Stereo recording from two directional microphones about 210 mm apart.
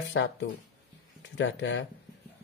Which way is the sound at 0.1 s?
60° left (ahead or behind).